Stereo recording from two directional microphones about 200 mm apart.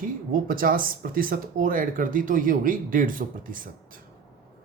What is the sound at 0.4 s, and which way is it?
Speech, 45° right (ahead or behind).